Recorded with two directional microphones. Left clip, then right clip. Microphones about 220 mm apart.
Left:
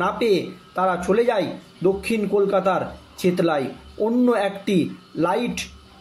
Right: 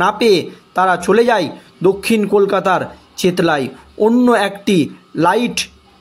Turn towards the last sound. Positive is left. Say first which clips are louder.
# right 8 dB
turn(degrees=-50)  # may be behind; listen again after turning